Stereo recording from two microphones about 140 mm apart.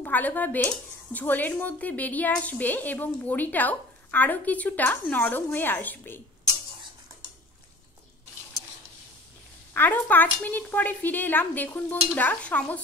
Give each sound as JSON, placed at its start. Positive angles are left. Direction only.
{"t": 0.0, "sound": "a woman's voice", "side_deg": 10}
{"t": 9.8, "sound": "a woman's voice", "side_deg": 15}